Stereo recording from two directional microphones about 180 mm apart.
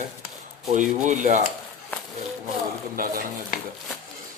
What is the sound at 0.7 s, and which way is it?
Speech, 45° right (ahead or behind).